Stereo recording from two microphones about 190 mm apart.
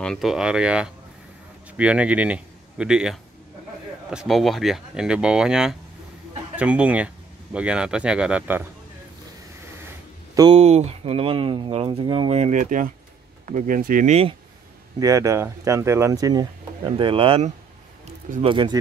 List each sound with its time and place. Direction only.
0.0 s speech: centre (ahead or behind)
10.3 s speech: 20° right (ahead or behind)
10.6 s speech: 35° right (ahead or behind)
15.0 s speech: 20° right (ahead or behind)